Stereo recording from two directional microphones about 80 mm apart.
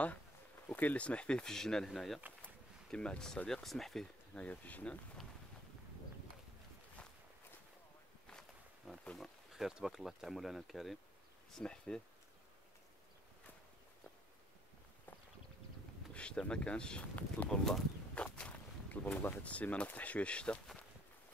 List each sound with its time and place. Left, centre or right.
0.7 s speech: centre
2.4 s speech: centre
4.4 s speech: centre
8.3 s walk: centre
9.0 s speech: centre
9.5 s speech: centre
11.5 s speech: centre
16.1 s speech: centre
17.5 s speech: centre
18.1 s walk: centre
18.9 s speech: left